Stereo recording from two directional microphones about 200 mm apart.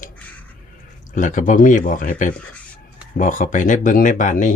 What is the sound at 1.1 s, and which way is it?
Speech, 40° left (ahead or behind).